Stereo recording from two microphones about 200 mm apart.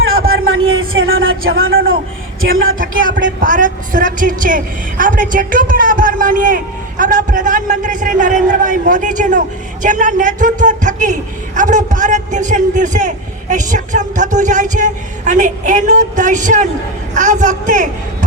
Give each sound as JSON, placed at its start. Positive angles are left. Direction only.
{"t": 0.4, "sound": "a sound", "side_deg": -90}
{"t": 2.4, "sound": "speech", "side_deg": -90}
{"t": 2.7, "sound": "a man's voice", "side_deg": -40}